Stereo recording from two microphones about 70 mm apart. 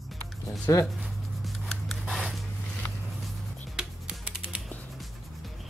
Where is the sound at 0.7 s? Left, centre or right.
Left.